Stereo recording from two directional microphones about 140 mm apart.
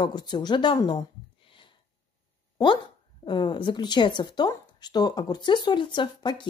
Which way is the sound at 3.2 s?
35° left (ahead or behind).